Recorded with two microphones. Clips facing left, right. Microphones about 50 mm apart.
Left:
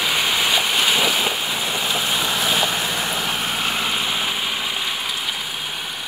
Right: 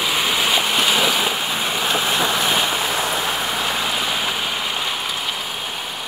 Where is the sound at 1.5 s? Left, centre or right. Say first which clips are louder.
Right 2 dB; right.